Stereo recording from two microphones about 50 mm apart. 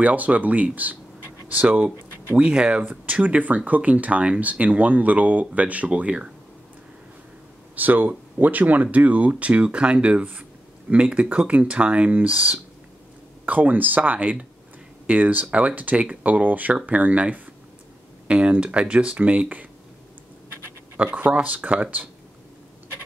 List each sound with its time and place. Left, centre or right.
0.0 s speech: right
2.3 s speech: centre
2.8 s speech: right
7.7 s speech: right
21.0 s speech: right